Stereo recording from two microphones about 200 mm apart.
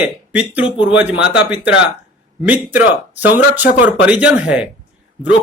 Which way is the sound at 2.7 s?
10° right (ahead or behind).